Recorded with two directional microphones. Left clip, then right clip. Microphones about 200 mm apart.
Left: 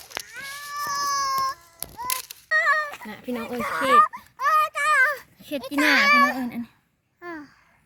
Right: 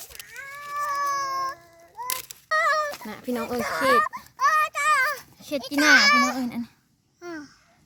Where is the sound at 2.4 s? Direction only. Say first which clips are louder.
Left 1 dB; 50° right (ahead or behind).